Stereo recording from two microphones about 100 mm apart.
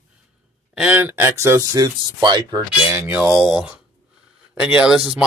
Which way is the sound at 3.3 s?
5° right (ahead or behind).